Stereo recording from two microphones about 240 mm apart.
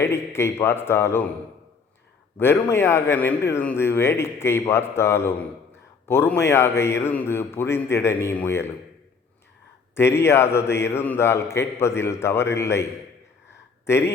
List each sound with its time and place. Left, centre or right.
0.0 s a man's voice: centre
2.4 s a man's voice: centre
9.9 s a man's voice: centre
13.8 s speech: centre